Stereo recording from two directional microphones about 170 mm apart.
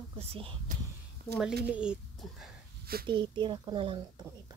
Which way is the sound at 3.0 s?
30° right (ahead or behind).